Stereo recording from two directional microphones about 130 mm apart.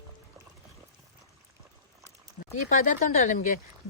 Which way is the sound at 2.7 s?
75° left (ahead or behind).